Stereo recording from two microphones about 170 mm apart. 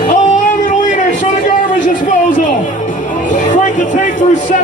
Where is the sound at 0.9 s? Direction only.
50° left (ahead or behind).